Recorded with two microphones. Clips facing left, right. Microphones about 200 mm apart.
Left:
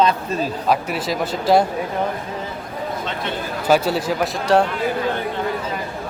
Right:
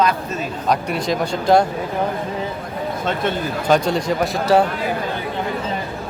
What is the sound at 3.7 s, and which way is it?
Speech, 5° left (ahead or behind).